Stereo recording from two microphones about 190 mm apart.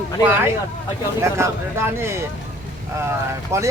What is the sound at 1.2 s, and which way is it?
Speech, 15° right (ahead or behind).